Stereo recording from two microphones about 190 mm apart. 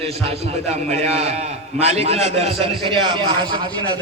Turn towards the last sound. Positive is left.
turn(degrees=-25)  # may be behind; listen again after turning